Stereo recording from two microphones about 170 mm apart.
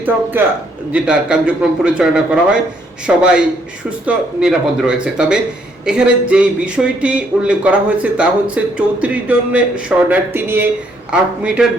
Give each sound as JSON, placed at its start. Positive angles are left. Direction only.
{"t": 0.4, "sound": "a man's voice", "side_deg": -15}